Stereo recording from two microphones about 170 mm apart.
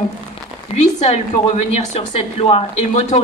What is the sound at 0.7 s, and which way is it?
Speech, 35° left (ahead or behind).